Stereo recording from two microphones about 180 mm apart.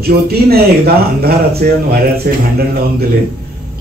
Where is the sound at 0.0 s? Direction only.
60° right (ahead or behind).